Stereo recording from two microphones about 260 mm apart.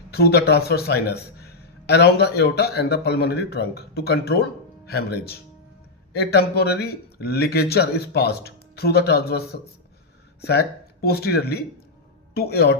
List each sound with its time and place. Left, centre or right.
0.1 s a man's voice: left